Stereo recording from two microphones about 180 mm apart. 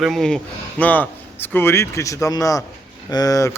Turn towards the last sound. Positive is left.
turn(degrees=20)  # may be behind; listen again after turning